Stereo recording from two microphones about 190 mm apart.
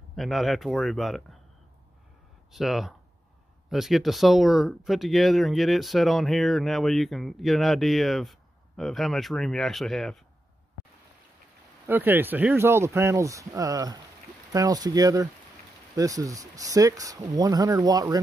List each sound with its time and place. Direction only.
0.1 s speech: centre (ahead or behind)
2.5 s speech: centre (ahead or behind)
11.8 s speech: 10° right (ahead or behind)